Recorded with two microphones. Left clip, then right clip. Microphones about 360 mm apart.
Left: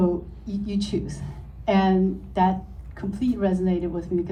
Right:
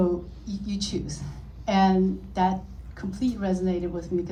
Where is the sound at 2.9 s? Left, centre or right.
Left.